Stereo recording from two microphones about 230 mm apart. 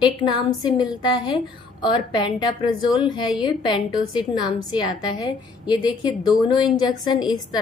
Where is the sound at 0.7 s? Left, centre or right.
Centre.